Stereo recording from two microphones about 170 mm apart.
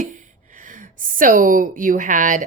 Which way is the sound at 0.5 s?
50° right (ahead or behind).